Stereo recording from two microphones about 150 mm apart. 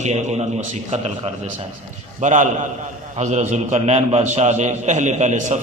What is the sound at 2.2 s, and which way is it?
A man's voice, 55° right (ahead or behind).